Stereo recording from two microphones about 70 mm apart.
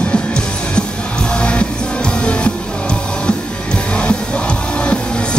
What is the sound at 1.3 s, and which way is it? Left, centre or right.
Music, centre.